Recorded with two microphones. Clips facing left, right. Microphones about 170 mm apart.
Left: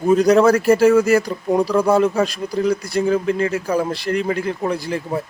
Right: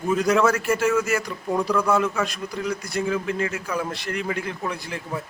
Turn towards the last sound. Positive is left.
turn(degrees=35)  # may be behind; listen again after turning